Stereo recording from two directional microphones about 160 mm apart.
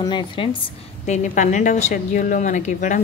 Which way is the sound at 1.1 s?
50° left (ahead or behind).